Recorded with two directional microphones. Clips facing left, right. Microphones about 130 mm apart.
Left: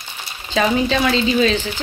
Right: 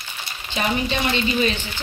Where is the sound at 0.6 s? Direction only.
90° left.